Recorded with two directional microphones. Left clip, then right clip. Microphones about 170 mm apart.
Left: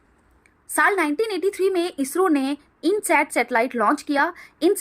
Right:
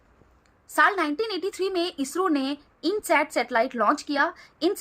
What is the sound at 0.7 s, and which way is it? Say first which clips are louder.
Speech: left 2 dB; 20° left (ahead or behind).